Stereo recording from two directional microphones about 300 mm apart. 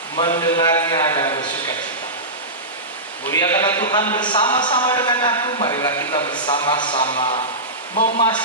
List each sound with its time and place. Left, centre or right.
0.2 s a man's voice: centre
3.2 s a man's voice: centre; by 8.3 s left